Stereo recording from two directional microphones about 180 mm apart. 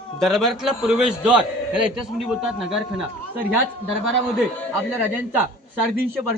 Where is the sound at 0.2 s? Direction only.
Centre (ahead or behind).